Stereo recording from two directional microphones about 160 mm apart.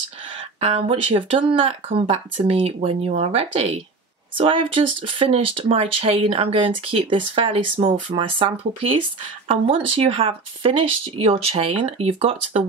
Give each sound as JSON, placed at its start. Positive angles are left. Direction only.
{"t": 0.4, "sound": "speech", "side_deg": -40}